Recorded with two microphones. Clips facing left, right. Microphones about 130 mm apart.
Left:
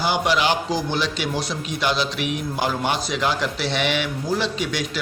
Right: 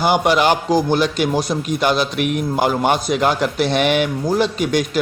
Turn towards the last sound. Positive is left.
turn(degrees=-45)  # may be behind; listen again after turning